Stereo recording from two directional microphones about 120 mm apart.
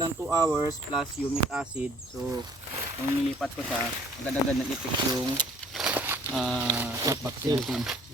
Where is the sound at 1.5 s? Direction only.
10° right (ahead or behind).